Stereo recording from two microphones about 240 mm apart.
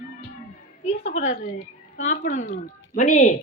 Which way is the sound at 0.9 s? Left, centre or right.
Left.